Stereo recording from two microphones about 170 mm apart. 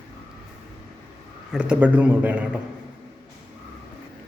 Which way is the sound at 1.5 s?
10° right (ahead or behind).